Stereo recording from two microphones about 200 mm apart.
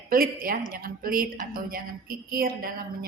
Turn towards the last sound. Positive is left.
turn(degrees=-50)  # may be behind; listen again after turning